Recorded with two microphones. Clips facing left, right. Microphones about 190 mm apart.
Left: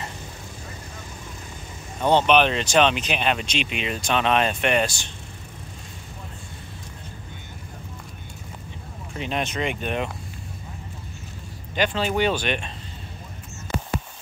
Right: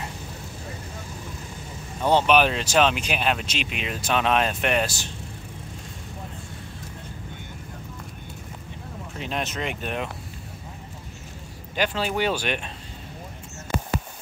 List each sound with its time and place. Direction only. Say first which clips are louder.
2.0 s speech: left 1 dB; 5° right (ahead or behind)
9.2 s speech: left 3 dB; centre (ahead or behind)
11.7 s speech: left 2 dB; 5° right (ahead or behind)